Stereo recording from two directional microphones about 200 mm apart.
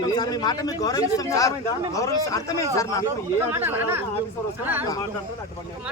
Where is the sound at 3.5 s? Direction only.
10° right (ahead or behind).